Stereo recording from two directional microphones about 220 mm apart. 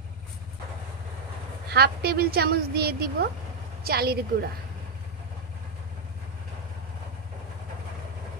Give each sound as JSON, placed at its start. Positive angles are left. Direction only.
{"t": 1.7, "sound": "a woman's voice", "side_deg": -45}